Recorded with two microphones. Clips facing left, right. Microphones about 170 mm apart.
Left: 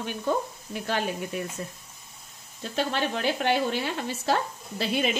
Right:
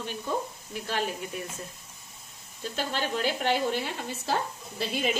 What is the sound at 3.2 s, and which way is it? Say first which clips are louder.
Speech: left 1 dB; 70° left (ahead or behind).